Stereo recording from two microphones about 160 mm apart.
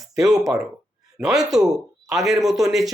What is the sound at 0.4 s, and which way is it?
Speech, 5° right (ahead or behind).